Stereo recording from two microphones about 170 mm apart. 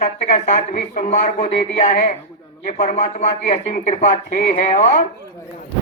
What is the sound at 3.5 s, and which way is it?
Speech, 45° left (ahead or behind).